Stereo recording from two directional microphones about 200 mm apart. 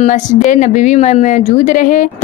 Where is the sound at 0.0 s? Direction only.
35° left (ahead or behind).